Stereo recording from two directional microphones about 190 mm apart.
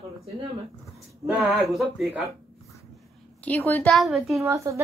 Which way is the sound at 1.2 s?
5° right (ahead or behind).